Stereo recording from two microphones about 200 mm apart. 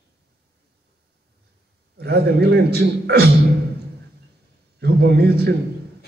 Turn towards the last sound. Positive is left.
turn(degrees=-55)  # may be behind; listen again after turning